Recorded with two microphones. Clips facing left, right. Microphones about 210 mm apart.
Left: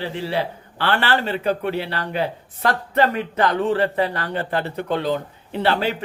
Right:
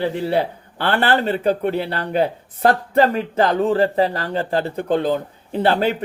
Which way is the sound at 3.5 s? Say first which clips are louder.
Right 4 dB; 40° right (ahead or behind).